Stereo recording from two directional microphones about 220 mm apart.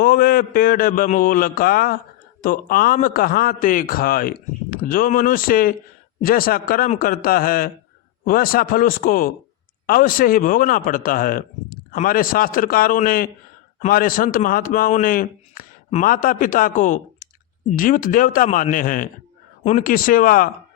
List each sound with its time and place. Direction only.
0.0 s a man's voice: 40° left (ahead or behind)